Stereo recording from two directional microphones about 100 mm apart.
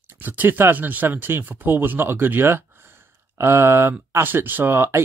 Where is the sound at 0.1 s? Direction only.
20° right (ahead or behind).